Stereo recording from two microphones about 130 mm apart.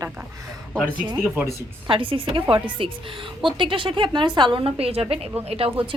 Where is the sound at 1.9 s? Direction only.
40° right (ahead or behind).